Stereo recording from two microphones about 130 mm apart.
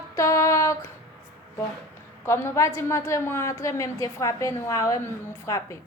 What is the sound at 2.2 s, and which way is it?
A woman's voice, 20° left (ahead or behind).